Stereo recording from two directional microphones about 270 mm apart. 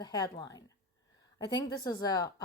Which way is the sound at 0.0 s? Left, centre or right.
Centre.